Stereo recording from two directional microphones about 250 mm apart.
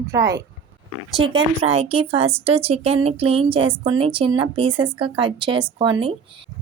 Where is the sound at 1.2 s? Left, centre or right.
Right.